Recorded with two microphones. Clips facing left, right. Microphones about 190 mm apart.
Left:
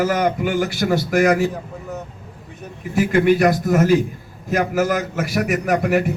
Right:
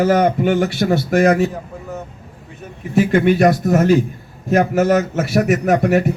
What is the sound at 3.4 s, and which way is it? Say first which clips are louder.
Speech: right 2 dB; 30° right (ahead or behind).